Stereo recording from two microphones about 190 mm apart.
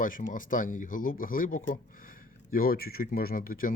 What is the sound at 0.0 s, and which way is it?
Speech, 45° left (ahead or behind).